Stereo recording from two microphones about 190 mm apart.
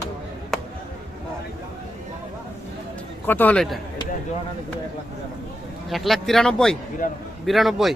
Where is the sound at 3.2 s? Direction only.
10° left (ahead or behind).